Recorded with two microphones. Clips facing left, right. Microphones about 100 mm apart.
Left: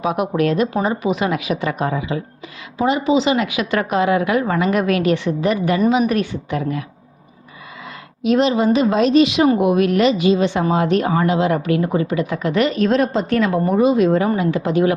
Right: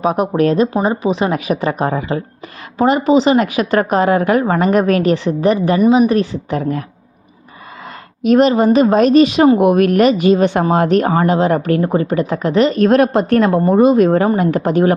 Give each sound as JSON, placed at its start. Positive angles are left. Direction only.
{"t": 0.0, "sound": "a woman's voice", "side_deg": -40}
{"t": 8.2, "sound": "speech", "side_deg": -50}
{"t": 12.8, "sound": "speech", "side_deg": -60}